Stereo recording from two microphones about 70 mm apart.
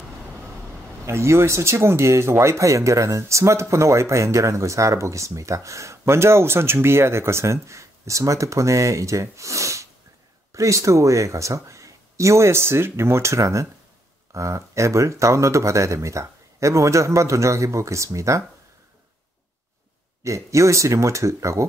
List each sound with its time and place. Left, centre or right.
1.0 s speech: right
20.2 s speech: right